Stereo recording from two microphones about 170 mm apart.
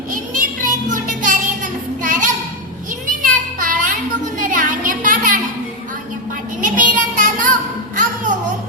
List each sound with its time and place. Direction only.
0.1 s child singing: 50° right (ahead or behind)
3.1 s a sound: 50° right (ahead or behind)
6.6 s child singing: 50° right (ahead or behind)
7.9 s music: 50° right (ahead or behind)